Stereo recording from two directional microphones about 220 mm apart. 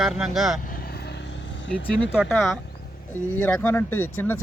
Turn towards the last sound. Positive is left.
turn(degrees=10)  # may be behind; listen again after turning